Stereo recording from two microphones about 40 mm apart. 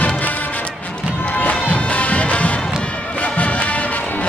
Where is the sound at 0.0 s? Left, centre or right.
Left.